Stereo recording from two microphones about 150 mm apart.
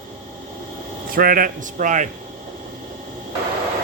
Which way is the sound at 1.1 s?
70° right (ahead or behind).